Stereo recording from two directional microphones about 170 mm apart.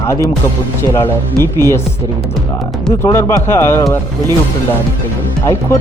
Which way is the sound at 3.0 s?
15° left (ahead or behind).